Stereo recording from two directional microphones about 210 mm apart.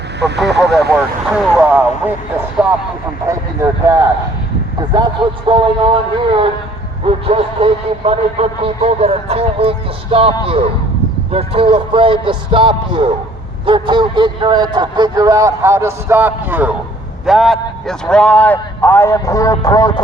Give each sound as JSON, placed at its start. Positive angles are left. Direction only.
{"t": 0.2, "sound": "speech", "side_deg": -55}
{"t": 1.3, "sound": "speech", "side_deg": -5}
{"t": 3.2, "sound": "speech", "side_deg": -15}
{"t": 5.5, "sound": "a man's voice", "side_deg": -25}